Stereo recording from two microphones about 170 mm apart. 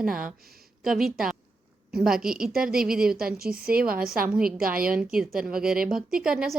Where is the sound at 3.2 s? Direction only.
60° right (ahead or behind).